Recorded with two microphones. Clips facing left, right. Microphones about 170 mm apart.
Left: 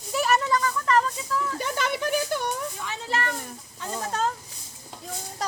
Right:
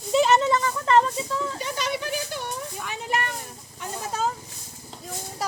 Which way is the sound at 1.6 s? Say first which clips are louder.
Left 2 dB; 55° left (ahead or behind).